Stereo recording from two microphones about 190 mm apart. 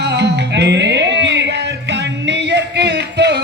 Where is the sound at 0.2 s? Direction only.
65° right (ahead or behind).